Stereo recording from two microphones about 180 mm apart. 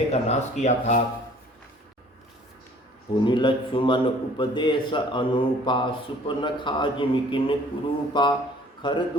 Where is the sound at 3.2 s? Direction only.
25° left (ahead or behind).